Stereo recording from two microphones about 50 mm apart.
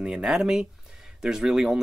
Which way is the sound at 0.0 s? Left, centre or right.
Centre.